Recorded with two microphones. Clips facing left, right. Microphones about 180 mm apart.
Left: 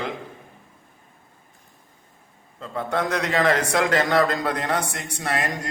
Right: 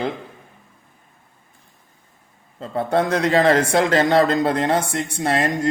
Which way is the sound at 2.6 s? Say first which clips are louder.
Right 5 dB; 35° right (ahead or behind).